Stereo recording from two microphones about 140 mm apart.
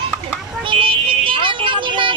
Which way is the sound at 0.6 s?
35° right (ahead or behind).